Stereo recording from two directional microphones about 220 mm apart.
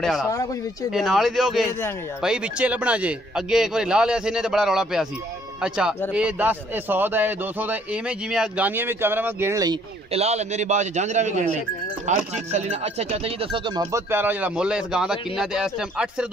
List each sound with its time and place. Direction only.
0.0 s a man's voice: centre (ahead or behind)
10.1 s a man's voice: 30° right (ahead or behind); by 16.3 s 5° right (ahead or behind)